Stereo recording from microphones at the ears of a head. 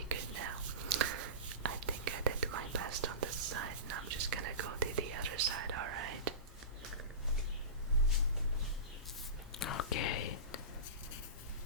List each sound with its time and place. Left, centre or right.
0.1 s whispering: right
9.5 s whispering: left